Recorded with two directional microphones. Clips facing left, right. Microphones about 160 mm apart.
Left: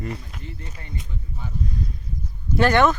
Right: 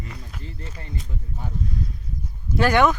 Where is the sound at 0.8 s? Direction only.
35° right (ahead or behind).